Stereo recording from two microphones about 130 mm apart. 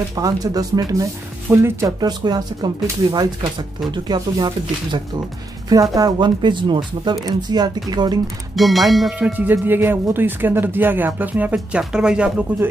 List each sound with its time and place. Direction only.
0.1 s speech: 30° right (ahead or behind)
8.5 s speech: centre (ahead or behind)
9.5 s speech: 15° right (ahead or behind)